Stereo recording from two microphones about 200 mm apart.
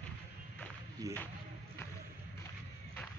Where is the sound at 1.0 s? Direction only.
20° right (ahead or behind).